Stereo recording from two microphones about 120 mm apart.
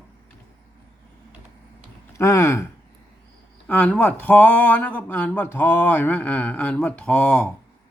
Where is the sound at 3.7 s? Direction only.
10° left (ahead or behind).